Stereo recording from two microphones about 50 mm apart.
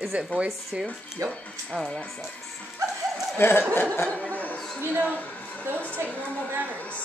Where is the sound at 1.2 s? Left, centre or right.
Right.